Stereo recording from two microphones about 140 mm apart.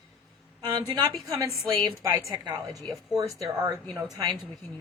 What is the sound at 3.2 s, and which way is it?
Speech, 25° right (ahead or behind).